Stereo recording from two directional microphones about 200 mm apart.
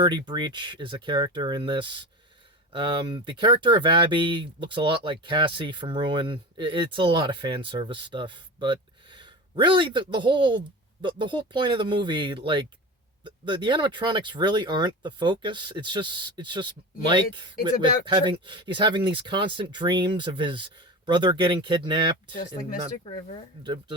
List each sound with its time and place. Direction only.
0.0 s speech: 20° right (ahead or behind)